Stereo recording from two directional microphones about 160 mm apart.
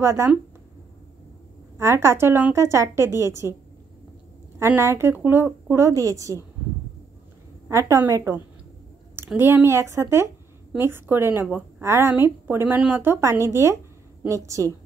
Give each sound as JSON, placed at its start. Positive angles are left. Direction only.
{"t": 0.0, "sound": "a woman's voice", "side_deg": -15}
{"t": 1.8, "sound": "a woman's voice", "side_deg": -15}
{"t": 4.6, "sound": "a woman's voice", "side_deg": -15}
{"t": 7.6, "sound": "a woman's voice", "side_deg": -15}
{"t": 9.4, "sound": "a woman's voice", "side_deg": -15}